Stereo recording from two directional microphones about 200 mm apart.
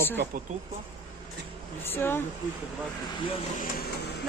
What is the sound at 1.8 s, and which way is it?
Speech, 10° left (ahead or behind).